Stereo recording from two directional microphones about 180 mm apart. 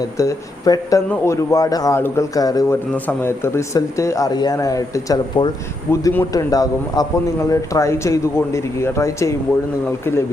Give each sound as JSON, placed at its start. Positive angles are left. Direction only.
{"t": 0.2, "sound": "a man's voice", "side_deg": 20}